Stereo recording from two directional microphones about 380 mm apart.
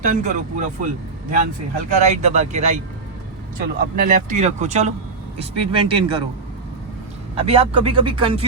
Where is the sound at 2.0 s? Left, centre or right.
Centre.